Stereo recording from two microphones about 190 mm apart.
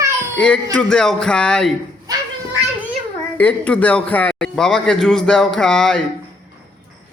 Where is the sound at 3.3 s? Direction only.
5° left (ahead or behind).